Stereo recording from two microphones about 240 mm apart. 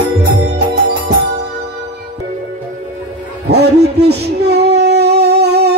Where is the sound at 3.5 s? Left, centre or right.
Right.